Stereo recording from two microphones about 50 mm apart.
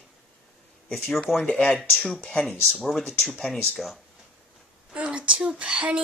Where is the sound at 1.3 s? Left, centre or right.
Left.